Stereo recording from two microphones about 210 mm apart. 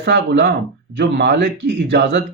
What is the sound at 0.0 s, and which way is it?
Speech, 55° right (ahead or behind).